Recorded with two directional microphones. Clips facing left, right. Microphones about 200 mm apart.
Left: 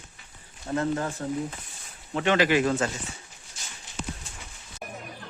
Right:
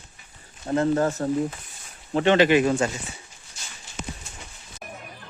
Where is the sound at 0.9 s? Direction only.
40° right (ahead or behind).